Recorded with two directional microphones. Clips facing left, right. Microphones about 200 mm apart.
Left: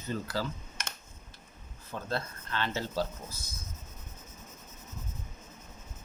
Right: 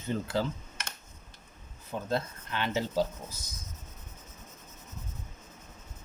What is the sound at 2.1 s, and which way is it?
Speech, 15° right (ahead or behind).